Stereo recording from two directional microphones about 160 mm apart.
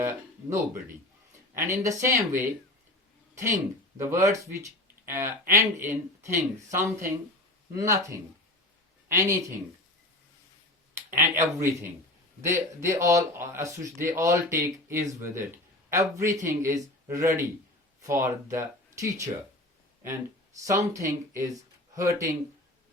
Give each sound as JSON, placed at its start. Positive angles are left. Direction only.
{"t": 0.0, "sound": "speech", "side_deg": -15}
{"t": 10.9, "sound": "speech", "side_deg": -15}
{"t": 20.6, "sound": "speech", "side_deg": -20}